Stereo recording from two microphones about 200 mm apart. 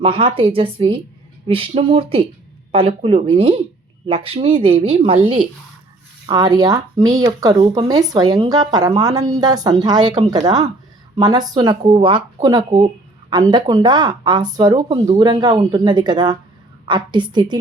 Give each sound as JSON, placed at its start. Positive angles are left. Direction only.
{"t": 0.0, "sound": "speech", "side_deg": -25}